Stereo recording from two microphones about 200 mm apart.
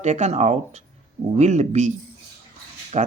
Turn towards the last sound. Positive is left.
turn(degrees=-30)  # may be behind; listen again after turning